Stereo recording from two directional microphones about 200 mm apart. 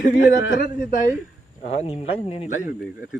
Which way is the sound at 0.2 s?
65° left (ahead or behind).